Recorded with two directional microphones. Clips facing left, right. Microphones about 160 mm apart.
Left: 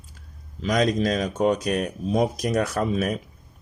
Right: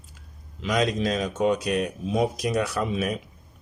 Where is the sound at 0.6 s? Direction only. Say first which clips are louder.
Left 2 dB; 40° left (ahead or behind).